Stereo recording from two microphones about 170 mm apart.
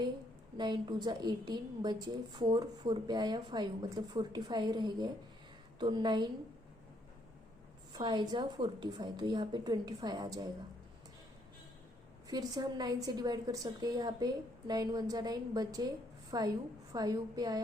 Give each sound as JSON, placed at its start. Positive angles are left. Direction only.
{"t": 0.5, "sound": "a woman's voice", "side_deg": -25}
{"t": 7.9, "sound": "a woman's voice", "side_deg": -25}
{"t": 12.3, "sound": "a woman's voice", "side_deg": -25}